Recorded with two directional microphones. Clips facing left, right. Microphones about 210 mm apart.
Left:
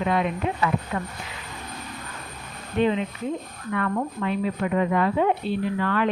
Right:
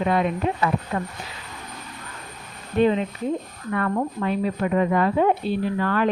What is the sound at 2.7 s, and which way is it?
A woman's voice, 40° right (ahead or behind).